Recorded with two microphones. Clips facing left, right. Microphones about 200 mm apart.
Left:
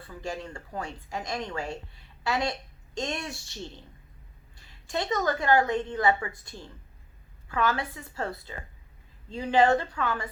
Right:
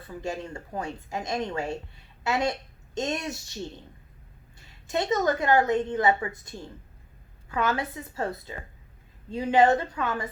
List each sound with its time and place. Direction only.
0.1 s a woman's voice: 20° right (ahead or behind)
4.9 s a woman's voice: 20° right (ahead or behind)